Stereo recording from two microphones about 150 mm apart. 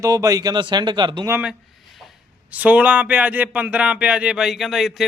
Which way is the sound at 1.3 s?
10° right (ahead or behind).